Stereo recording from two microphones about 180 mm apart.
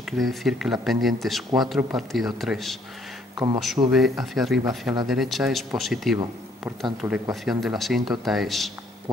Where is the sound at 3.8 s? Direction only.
25° right (ahead or behind).